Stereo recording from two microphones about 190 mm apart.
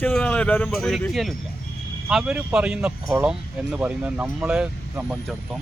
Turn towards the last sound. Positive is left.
turn(degrees=-5)  # may be behind; listen again after turning